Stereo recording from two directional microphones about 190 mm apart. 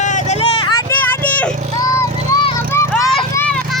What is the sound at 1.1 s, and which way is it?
Vehicle, 10° left (ahead or behind).